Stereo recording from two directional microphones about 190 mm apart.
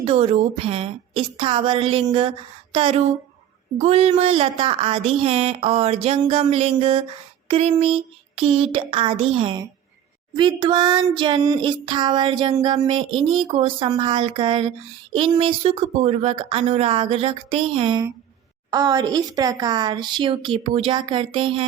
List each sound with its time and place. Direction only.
0.0 s speech: 30° right (ahead or behind)